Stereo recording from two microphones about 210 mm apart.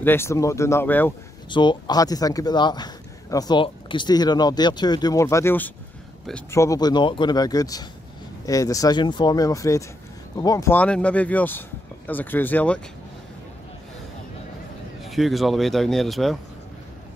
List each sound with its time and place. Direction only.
0.0 s speech: 10° left (ahead or behind)
1.5 s speech: 20° left (ahead or behind)
15.0 s speech: centre (ahead or behind)